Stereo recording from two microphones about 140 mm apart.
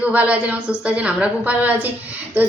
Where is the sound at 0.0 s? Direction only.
10° right (ahead or behind).